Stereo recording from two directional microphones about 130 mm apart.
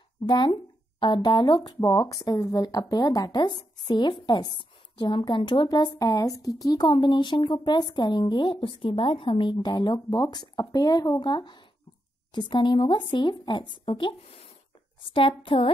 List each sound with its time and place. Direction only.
0.2 s speech: 50° left (ahead or behind)
0.9 s a woman's voice: 35° left (ahead or behind)